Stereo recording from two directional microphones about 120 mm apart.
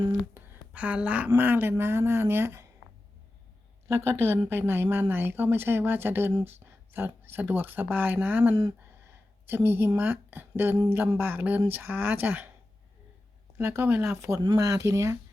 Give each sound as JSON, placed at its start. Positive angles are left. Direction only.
{"t": 0.3, "sound": "a sound", "side_deg": -10}
{"t": 1.4, "sound": "speech", "side_deg": -15}
{"t": 3.8, "sound": "a woman's voice", "side_deg": -20}
{"t": 13.6, "sound": "speech", "side_deg": -20}